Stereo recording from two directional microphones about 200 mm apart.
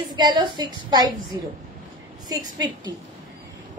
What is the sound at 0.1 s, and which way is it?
A woman's voice, 20° right (ahead or behind).